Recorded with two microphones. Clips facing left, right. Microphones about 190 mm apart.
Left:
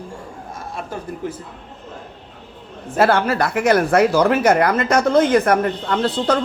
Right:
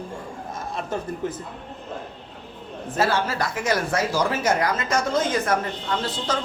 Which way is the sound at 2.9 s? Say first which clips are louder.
Left 7 dB; 60° left (ahead or behind).